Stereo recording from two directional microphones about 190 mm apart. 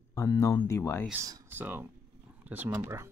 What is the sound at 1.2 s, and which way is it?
Speech, 15° right (ahead or behind).